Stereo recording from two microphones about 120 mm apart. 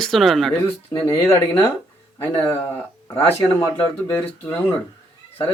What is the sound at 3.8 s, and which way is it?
Speech, 15° left (ahead or behind).